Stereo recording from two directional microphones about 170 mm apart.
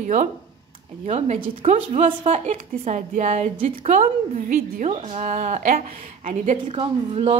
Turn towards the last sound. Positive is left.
turn(degrees=-35)  # may be behind; listen again after turning